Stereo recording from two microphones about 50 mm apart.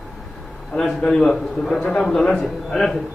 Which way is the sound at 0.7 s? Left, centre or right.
Centre.